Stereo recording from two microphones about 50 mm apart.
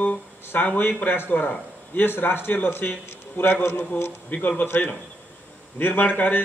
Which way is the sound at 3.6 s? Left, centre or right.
Left.